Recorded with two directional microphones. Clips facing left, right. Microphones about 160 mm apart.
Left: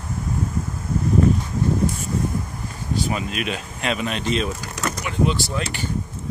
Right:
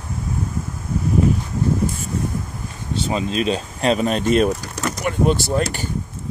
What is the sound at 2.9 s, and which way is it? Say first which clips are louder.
Speech: right 3 dB; 25° right (ahead or behind).